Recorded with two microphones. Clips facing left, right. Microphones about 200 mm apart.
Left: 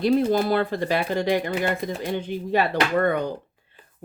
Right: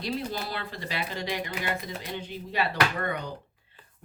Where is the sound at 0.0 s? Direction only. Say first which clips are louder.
Left 12 dB; 50° left (ahead or behind).